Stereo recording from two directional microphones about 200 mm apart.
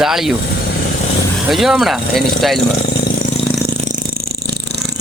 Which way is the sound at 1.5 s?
Centre (ahead or behind).